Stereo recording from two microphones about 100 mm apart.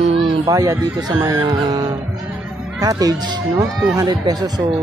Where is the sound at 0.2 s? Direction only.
35° right (ahead or behind).